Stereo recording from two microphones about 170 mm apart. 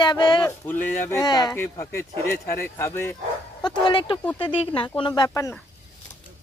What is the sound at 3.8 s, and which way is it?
Speech, 30° left (ahead or behind).